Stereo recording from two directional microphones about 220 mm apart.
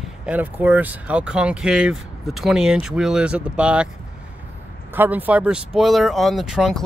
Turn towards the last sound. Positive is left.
turn(degrees=0)  # may be behind; listen again after turning